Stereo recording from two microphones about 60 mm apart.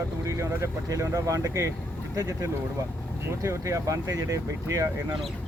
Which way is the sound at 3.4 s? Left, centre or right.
Right.